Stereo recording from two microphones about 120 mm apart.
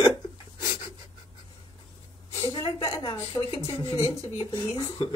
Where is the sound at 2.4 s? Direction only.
30° left (ahead or behind).